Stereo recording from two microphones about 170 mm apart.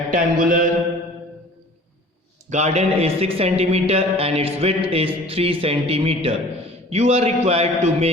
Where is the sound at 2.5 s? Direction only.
40° right (ahead or behind).